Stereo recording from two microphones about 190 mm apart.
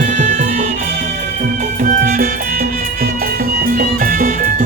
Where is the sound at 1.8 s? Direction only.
50° right (ahead or behind).